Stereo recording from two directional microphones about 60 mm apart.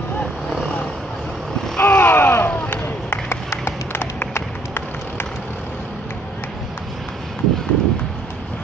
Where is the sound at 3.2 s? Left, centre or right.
Left.